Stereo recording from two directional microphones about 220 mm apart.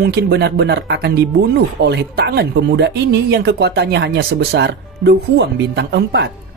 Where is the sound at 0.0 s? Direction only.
50° right (ahead or behind).